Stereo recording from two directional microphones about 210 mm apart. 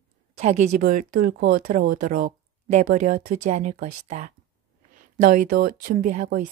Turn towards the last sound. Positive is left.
turn(degrees=-40)  # may be behind; listen again after turning